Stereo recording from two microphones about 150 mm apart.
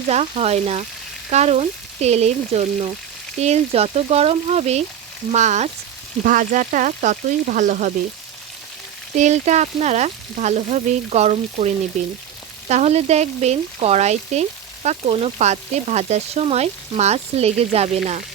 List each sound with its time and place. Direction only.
0.1 s frying: 45° right (ahead or behind)
6.2 s speech: 60° right (ahead or behind)
9.1 s frying: 50° right (ahead or behind)